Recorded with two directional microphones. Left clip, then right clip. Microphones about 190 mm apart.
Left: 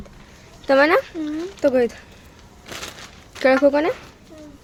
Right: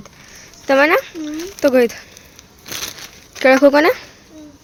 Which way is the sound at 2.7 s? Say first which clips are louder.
Right 6 dB; 40° right (ahead or behind).